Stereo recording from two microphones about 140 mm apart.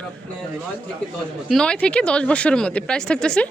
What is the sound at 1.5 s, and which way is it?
Speech, 5° left (ahead or behind).